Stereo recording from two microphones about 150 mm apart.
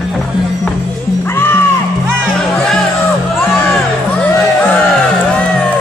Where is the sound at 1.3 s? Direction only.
15° left (ahead or behind).